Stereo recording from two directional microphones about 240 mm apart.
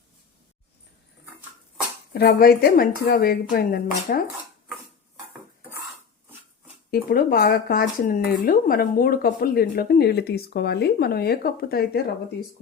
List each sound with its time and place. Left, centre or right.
2.1 s speech: left
6.9 s speech: left